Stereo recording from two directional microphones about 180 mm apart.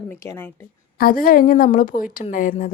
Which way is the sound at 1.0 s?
50° left (ahead or behind).